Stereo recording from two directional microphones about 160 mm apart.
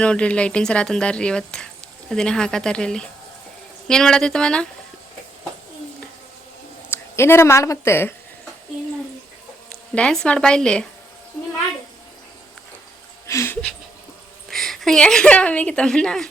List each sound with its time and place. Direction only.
0.0 s speech: 5° left (ahead or behind)
6.9 s a woman's voice: 15° left (ahead or behind)
9.9 s speech: 5° left (ahead or behind)
13.2 s speech: 15° left (ahead or behind)
14.5 s speech: centre (ahead or behind)